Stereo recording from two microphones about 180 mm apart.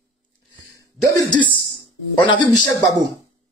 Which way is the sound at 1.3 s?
25° left (ahead or behind).